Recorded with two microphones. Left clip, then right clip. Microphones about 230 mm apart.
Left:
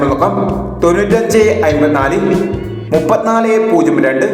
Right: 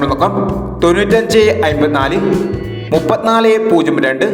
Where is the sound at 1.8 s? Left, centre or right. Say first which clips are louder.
Left 1 dB; right.